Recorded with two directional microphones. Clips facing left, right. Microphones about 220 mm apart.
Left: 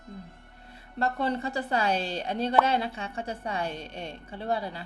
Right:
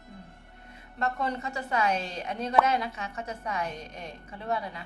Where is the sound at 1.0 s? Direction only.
35° left (ahead or behind).